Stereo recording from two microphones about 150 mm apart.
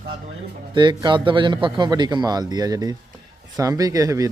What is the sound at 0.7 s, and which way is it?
A man's voice, 30° right (ahead or behind).